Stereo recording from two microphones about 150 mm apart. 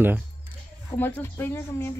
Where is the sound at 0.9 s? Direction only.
15° left (ahead or behind).